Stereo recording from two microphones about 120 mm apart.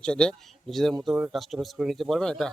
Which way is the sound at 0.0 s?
5° left (ahead or behind).